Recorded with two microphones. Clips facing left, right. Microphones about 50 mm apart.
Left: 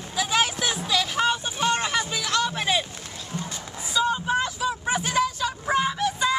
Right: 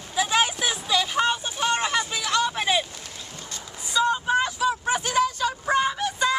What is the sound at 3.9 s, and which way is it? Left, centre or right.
Vehicle, centre.